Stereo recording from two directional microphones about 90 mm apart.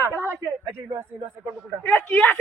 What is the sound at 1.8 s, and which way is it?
Speech, 20° left (ahead or behind).